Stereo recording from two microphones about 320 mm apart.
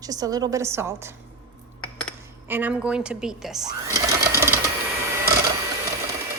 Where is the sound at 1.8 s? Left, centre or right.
Centre.